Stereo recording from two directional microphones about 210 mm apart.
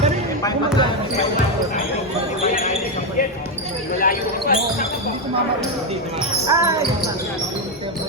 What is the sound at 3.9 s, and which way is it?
Basketball bounce, 40° left (ahead or behind).